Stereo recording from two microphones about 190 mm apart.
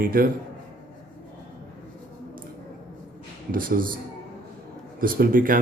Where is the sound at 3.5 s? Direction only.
45° right (ahead or behind).